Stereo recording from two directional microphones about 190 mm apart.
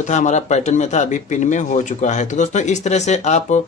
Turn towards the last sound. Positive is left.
turn(degrees=35)  # may be behind; listen again after turning